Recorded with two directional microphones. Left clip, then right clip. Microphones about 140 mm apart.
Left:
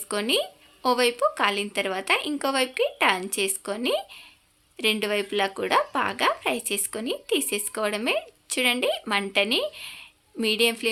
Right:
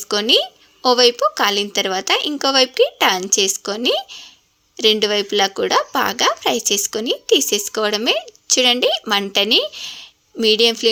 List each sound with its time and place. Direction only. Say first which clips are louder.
0.1 s speech: right 9 dB; 35° right (ahead or behind)